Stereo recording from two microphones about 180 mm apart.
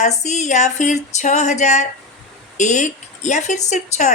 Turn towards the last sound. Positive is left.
turn(degrees=40)  # may be behind; listen again after turning